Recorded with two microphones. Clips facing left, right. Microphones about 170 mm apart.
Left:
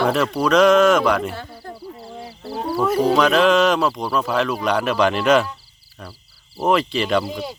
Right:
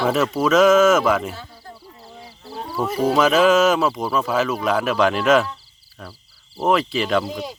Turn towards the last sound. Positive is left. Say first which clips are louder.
# left 1 dB
turn(degrees=0)  # may be behind; listen again after turning